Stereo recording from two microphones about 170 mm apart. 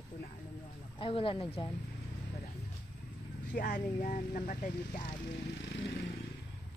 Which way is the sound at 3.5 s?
55° left (ahead or behind).